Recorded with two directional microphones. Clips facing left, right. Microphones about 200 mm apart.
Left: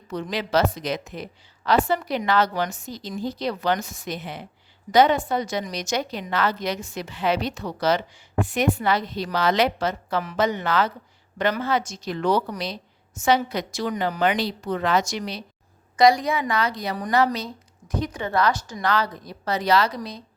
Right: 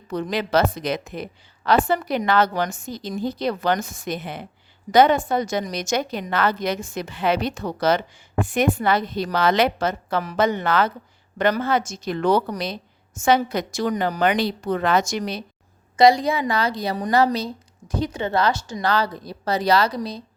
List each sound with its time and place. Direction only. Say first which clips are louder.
0.1 s a woman's voice: right 2 dB; 50° right (ahead or behind)
14.2 s a woman's voice: right 2 dB; 55° right (ahead or behind)
16.0 s a woman's voice: right 2 dB; 25° right (ahead or behind)